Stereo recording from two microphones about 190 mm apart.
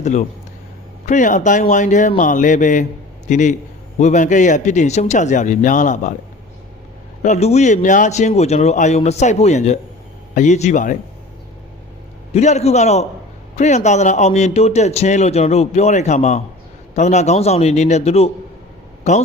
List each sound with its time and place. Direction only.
0.0 s a man's voice: 40° left (ahead or behind)
7.2 s speech: 35° left (ahead or behind)
12.3 s speech: 35° left (ahead or behind)